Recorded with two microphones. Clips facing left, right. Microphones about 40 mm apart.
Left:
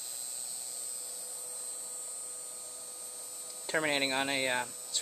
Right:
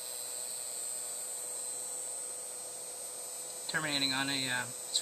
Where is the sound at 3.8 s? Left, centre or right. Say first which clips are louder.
Left 3 dB; left.